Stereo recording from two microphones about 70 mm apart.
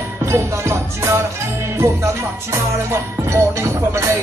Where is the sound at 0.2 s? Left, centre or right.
Right.